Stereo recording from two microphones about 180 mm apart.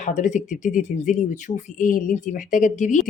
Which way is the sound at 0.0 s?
40° left (ahead or behind).